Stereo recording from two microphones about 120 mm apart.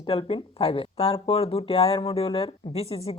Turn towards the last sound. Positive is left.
turn(degrees=55)  # may be behind; listen again after turning